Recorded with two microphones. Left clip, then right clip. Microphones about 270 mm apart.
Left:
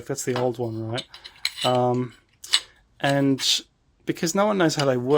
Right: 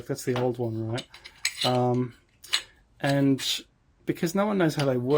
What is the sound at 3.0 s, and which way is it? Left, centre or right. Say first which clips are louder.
Speech: left 4 dB; centre.